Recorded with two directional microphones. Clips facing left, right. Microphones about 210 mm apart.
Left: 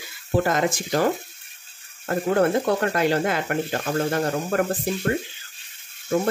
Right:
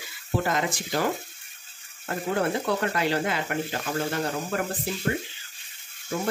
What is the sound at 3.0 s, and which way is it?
Speech, 50° left (ahead or behind).